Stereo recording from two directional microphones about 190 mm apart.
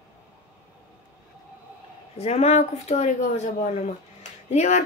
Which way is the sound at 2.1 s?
35° left (ahead or behind).